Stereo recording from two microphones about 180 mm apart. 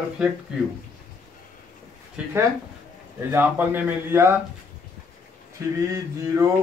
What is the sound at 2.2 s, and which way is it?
Speech, 5° right (ahead or behind).